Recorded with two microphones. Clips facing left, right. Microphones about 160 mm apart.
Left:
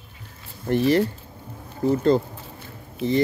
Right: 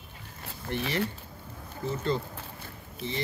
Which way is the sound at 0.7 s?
40° left (ahead or behind).